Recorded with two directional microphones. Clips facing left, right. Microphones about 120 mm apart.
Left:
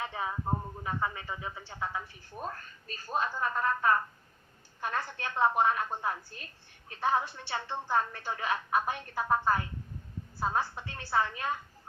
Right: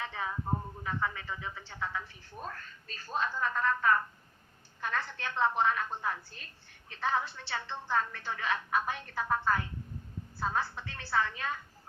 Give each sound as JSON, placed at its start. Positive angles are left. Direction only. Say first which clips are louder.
{"t": 0.0, "sound": "a woman's voice", "louder": "left 2 dB", "side_deg": 20}